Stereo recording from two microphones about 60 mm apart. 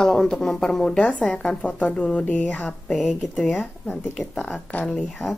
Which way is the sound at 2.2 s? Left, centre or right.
Left.